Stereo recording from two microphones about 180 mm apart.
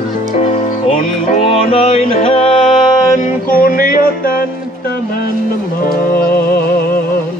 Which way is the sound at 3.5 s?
55° left (ahead or behind).